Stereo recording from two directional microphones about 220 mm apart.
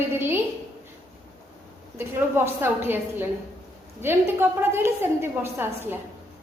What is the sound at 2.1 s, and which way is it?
A woman's voice, 10° right (ahead or behind).